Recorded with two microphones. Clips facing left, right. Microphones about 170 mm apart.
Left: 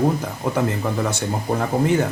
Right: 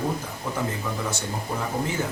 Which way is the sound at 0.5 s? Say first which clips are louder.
Left 7 dB; 65° left (ahead or behind).